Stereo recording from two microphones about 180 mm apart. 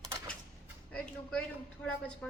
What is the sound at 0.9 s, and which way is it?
Speech, 5° left (ahead or behind).